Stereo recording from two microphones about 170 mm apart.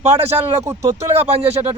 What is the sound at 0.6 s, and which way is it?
Speech, 15° right (ahead or behind).